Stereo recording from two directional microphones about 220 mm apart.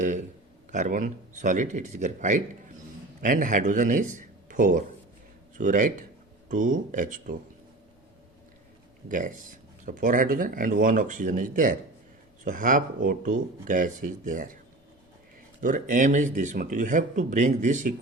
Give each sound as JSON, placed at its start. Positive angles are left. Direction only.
{"t": 0.7, "sound": "speech", "side_deg": -35}
{"t": 9.0, "sound": "speech", "side_deg": -35}
{"t": 15.6, "sound": "speech", "side_deg": -35}